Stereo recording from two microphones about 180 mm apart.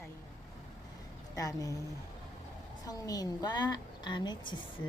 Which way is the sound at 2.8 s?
20° left (ahead or behind).